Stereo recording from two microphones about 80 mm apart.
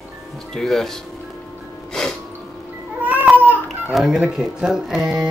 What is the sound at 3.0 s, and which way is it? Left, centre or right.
Babbling, centre.